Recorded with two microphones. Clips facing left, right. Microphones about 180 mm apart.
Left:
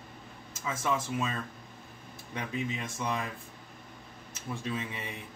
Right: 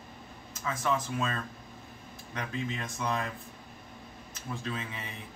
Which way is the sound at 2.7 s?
10° left (ahead or behind).